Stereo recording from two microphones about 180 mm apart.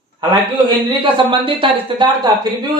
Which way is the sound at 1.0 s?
30° right (ahead or behind).